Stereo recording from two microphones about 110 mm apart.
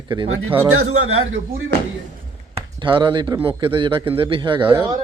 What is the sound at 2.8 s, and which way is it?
Speech, 45° right (ahead or behind).